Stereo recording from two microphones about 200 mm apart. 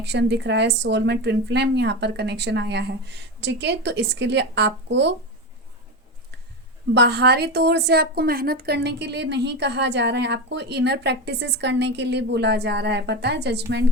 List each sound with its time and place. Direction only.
0.0 s a woman's voice: 60° right (ahead or behind)
6.9 s a woman's voice: 55° right (ahead or behind)